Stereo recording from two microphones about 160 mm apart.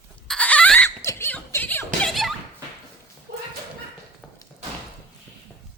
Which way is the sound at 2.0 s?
Centre (ahead or behind).